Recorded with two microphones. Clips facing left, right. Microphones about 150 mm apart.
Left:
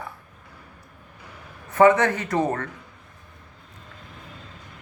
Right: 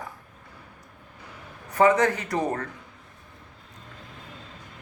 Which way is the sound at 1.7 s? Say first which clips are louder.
Left 3 dB; 35° right (ahead or behind).